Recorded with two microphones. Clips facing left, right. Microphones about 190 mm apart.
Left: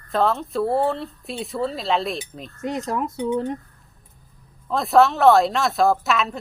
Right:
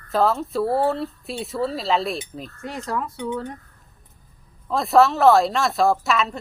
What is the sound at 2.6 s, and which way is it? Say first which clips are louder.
Speech: left 4 dB; 20° left (ahead or behind).